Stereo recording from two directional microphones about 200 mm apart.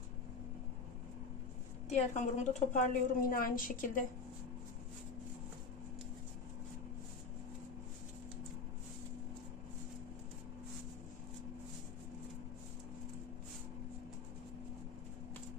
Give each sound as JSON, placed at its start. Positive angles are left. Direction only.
{"t": 1.9, "sound": "a woman's voice", "side_deg": 35}